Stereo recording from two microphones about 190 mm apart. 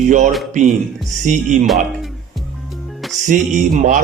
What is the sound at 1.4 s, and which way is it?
Speech, centre (ahead or behind).